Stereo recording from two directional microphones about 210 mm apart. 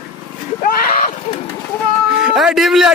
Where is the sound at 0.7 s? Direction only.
40° left (ahead or behind).